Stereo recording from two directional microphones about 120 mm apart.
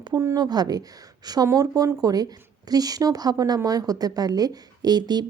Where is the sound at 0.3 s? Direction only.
35° right (ahead or behind).